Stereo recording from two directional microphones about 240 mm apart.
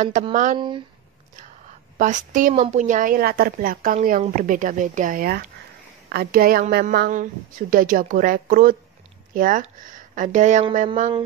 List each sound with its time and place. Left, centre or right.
0.0 s a woman's voice: right
0.6 s speech: centre
2.0 s a woman's voice: right